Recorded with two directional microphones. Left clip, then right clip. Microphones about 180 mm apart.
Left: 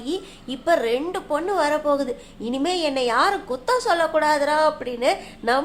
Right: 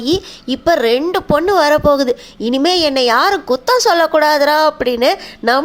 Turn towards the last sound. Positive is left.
turn(degrees=-40)  # may be behind; listen again after turning